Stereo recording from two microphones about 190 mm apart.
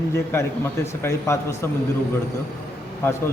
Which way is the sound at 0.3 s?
10° left (ahead or behind).